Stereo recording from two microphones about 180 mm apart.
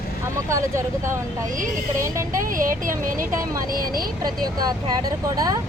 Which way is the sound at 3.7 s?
55° right (ahead or behind).